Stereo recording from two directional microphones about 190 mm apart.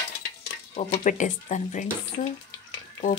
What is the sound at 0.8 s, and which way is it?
Speech, 40° left (ahead or behind).